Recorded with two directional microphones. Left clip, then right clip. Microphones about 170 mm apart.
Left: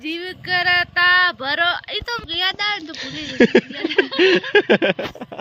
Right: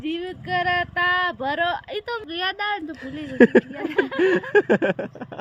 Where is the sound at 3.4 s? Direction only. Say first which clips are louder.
Left 1 dB; 30° left (ahead or behind).